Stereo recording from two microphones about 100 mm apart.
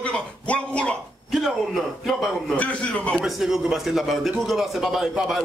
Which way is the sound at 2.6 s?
10° left (ahead or behind).